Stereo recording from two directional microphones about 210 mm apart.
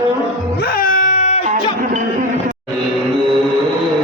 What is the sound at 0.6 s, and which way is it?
Wail, 40° left (ahead or behind).